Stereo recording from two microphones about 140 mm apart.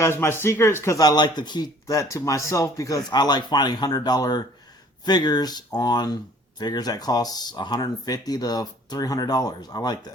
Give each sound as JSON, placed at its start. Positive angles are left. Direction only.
{"t": 0.0, "sound": "speech", "side_deg": 15}